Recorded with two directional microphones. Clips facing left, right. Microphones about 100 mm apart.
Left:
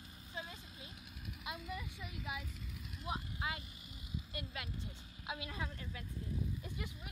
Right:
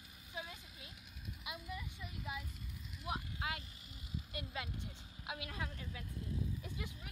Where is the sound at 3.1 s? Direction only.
5° right (ahead or behind).